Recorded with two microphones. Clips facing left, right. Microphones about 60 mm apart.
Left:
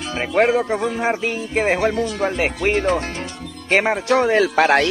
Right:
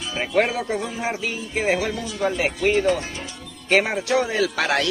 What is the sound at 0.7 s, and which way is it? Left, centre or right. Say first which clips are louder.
Speech: left 5 dB; left.